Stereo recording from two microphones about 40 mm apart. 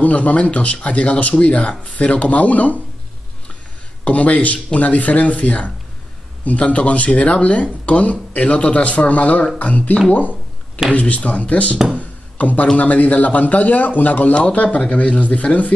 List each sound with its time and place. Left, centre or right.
0.0 s speech: left
4.0 s speech: left
11.0 s speech: left
11.9 s music: left
12.7 s speech: left